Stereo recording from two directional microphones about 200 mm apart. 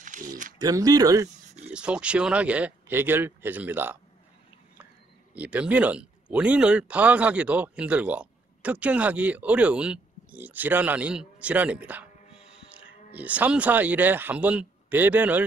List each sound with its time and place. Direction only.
0.0 s a sound: 40° right (ahead or behind)
0.6 s speech: 20° right (ahead or behind)
1.7 s speech: 5° right (ahead or behind)
5.3 s speech: 5° right (ahead or behind)